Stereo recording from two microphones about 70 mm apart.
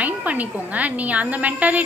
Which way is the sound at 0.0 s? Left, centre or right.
Right.